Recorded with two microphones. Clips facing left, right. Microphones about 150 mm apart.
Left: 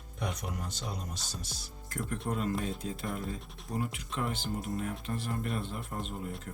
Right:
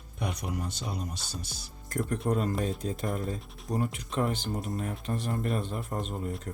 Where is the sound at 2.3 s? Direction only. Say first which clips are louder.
Right 3 dB; 40° right (ahead or behind).